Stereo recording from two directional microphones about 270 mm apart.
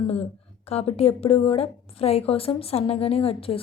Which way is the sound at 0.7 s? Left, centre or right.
Left.